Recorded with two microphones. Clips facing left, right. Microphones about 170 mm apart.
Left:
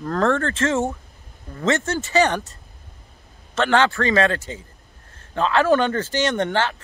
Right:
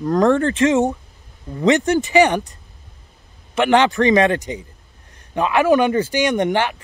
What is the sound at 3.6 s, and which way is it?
A man's voice, 15° right (ahead or behind).